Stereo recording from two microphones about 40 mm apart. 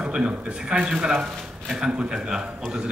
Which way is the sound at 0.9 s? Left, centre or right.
Centre.